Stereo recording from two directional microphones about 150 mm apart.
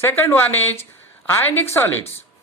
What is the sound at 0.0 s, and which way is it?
A woman's voice, 15° left (ahead or behind).